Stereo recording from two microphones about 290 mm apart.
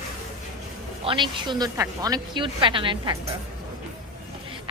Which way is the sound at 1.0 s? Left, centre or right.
Centre.